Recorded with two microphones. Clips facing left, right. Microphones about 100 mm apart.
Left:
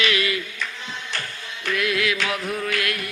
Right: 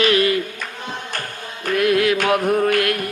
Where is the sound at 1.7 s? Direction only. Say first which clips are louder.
Right 7 dB; 45° right (ahead or behind).